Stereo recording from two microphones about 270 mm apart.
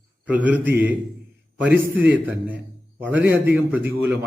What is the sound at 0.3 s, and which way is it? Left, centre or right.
A man's voice, centre.